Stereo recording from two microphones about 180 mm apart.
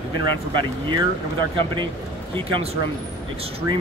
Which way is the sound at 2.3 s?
30° right (ahead or behind).